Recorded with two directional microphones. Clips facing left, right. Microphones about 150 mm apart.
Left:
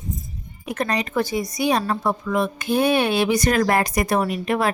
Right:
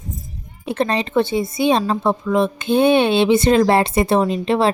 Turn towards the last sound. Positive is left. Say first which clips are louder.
# right 5 dB
turn(degrees=-25)  # may be behind; listen again after turning